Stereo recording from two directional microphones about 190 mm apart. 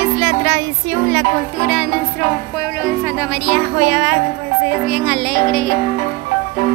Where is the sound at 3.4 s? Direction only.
5° right (ahead or behind).